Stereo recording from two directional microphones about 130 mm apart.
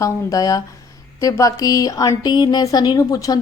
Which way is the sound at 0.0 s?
25° left (ahead or behind).